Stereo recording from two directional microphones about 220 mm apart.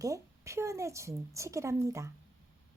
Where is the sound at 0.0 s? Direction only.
15° right (ahead or behind).